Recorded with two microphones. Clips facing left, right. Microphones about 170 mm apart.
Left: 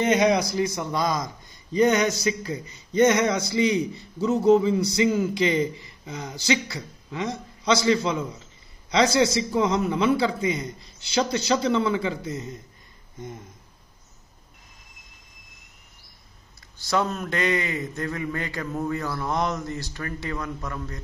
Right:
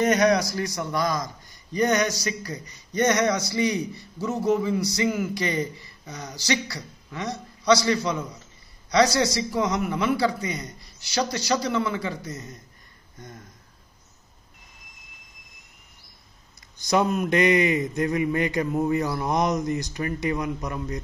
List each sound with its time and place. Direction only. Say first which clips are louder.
0.0 s a man's voice: even; 20° left (ahead or behind)
16.7 s speech: right 3 dB; 15° right (ahead or behind)